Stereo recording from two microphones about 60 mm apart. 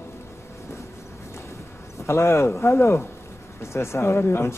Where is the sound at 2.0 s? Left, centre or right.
Left.